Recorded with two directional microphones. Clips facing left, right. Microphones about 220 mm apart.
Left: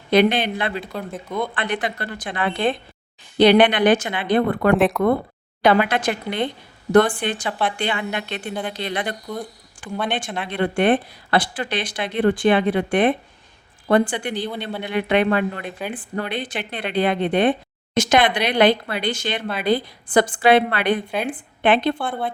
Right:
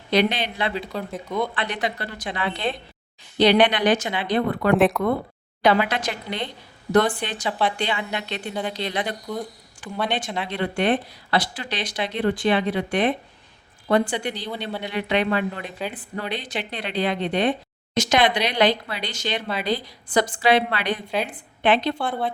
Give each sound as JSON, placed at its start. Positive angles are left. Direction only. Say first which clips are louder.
{"t": 0.1, "sound": "speech", "louder": "left 5 dB", "side_deg": 55}
{"t": 0.9, "sound": "speech", "louder": "even", "side_deg": 0}
{"t": 1.5, "sound": "speech", "louder": "left 2 dB", "side_deg": 50}
{"t": 4.7, "sound": "speech", "louder": "right 1 dB", "side_deg": 0}
{"t": 5.6, "sound": "speech", "louder": "left 3 dB", "side_deg": 55}
{"t": 21.9, "sound": "speech", "louder": "even", "side_deg": 0}